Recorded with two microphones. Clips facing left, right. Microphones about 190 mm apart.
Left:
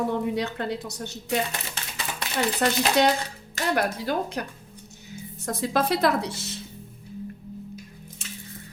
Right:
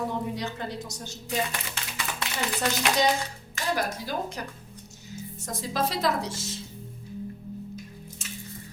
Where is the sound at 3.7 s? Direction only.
60° left (ahead or behind).